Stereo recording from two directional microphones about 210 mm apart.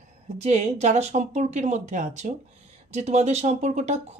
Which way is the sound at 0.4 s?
30° right (ahead or behind).